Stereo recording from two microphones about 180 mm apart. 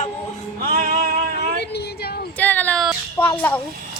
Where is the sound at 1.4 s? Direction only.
70° left (ahead or behind).